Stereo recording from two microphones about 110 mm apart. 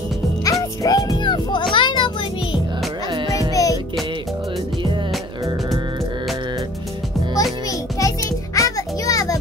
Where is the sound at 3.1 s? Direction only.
45° right (ahead or behind).